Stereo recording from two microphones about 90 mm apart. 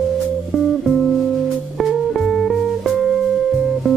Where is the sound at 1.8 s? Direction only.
Centre (ahead or behind).